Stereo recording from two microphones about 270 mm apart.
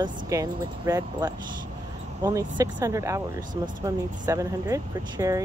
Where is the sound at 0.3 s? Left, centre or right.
Centre.